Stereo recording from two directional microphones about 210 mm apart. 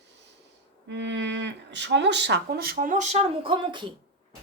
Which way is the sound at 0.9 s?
55° right (ahead or behind).